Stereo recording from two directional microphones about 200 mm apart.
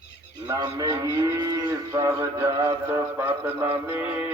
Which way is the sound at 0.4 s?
20° right (ahead or behind).